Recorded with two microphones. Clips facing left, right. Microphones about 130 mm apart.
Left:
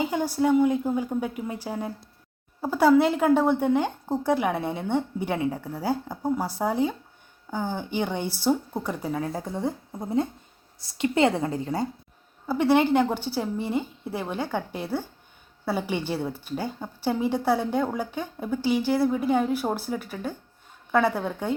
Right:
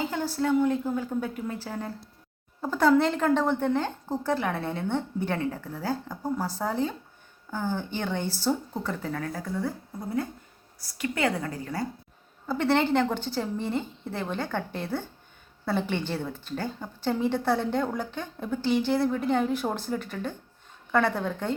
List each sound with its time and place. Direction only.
0.0 s speech: 15° left (ahead or behind)
9.3 s a woman's voice: 25° left (ahead or behind)
12.5 s speech: 10° left (ahead or behind)